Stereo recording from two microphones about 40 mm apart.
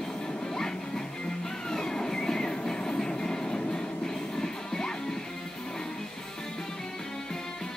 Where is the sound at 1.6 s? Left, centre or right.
Centre.